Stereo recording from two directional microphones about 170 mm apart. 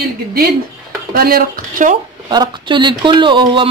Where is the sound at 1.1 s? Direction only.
60° right (ahead or behind).